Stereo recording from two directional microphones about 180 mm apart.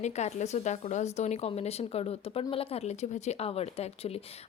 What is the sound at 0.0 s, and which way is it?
Speech, 40° left (ahead or behind).